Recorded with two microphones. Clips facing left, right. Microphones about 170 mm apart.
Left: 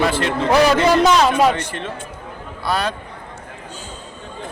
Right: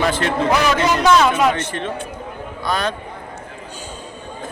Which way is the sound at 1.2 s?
35° left (ahead or behind).